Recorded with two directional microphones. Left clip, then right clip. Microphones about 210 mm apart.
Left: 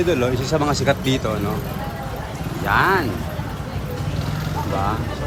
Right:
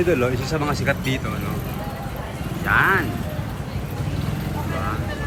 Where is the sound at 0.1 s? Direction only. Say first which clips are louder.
Left 1 dB; 10° left (ahead or behind).